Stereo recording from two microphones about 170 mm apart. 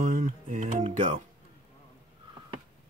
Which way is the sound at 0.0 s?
50° right (ahead or behind).